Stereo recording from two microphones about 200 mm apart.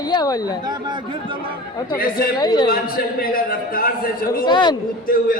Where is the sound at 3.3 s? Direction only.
45° left (ahead or behind).